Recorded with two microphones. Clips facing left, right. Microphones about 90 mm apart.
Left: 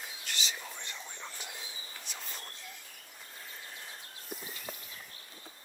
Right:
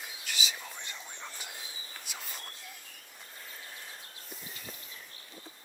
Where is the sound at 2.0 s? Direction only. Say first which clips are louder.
Right 1 dB; 5° right (ahead or behind).